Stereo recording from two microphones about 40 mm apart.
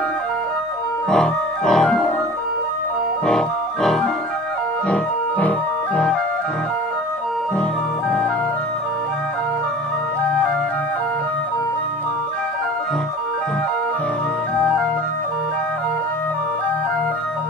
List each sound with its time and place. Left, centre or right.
1.1 s organ: centre
3.3 s music: centre
4.8 s organ: left